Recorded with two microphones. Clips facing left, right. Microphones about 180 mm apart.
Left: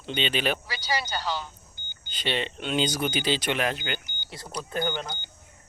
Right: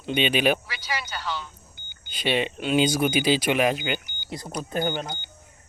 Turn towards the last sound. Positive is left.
turn(degrees=-15)  # may be behind; listen again after turning